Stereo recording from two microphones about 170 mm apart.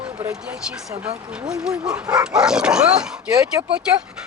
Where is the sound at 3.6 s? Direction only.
20° right (ahead or behind).